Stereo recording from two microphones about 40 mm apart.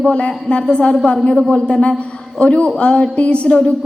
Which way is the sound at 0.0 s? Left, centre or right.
Left.